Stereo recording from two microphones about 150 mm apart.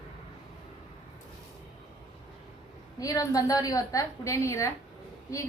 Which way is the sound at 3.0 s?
25° left (ahead or behind).